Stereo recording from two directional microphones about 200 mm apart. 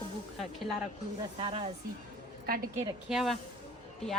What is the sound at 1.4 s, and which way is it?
Speech, 30° right (ahead or behind).